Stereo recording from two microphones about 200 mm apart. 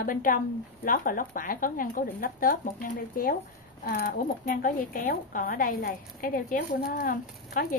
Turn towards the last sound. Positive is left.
turn(degrees=45)  # may be behind; listen again after turning